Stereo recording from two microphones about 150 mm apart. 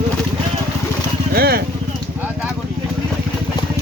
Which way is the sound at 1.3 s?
90° right.